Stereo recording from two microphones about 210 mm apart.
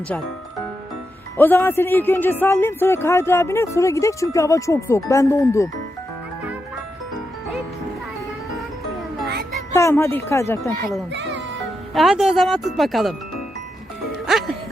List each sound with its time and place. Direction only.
1.4 s speech: 10° left (ahead or behind)
9.7 s speech: 15° left (ahead or behind)
10.6 s speech: centre (ahead or behind)
11.1 s speech: 60° right (ahead or behind)
11.9 s speech: centre (ahead or behind)
14.3 s music: centre (ahead or behind)